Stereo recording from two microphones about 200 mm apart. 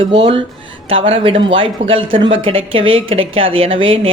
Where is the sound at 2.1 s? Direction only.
70° right (ahead or behind).